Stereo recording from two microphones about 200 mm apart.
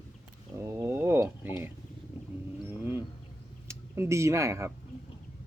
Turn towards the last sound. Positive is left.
turn(degrees=-15)  # may be behind; listen again after turning